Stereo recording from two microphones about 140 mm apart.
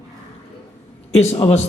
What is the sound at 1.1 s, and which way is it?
Speech, 50° left (ahead or behind).